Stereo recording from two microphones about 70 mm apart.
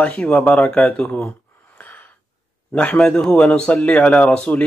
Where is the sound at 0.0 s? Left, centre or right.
Centre.